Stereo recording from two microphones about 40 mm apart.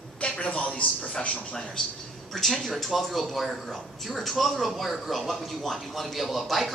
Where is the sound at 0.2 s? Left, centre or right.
Left.